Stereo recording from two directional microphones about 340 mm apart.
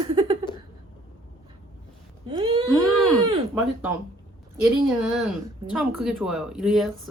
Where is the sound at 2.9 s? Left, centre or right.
Centre.